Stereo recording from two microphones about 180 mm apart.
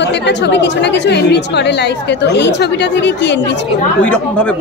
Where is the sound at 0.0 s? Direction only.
75° left (ahead or behind).